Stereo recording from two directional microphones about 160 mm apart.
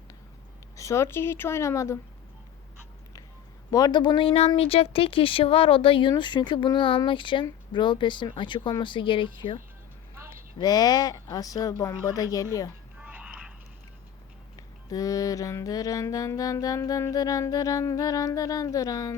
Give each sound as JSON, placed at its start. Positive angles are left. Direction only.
{"t": 0.8, "sound": "speech", "side_deg": 20}
{"t": 3.7, "sound": "speech", "side_deg": 20}
{"t": 7.4, "sound": "music", "side_deg": 30}
{"t": 10.6, "sound": "music", "side_deg": 25}
{"t": 13.0, "sound": "music", "side_deg": -10}
{"t": 14.8, "sound": "music", "side_deg": 20}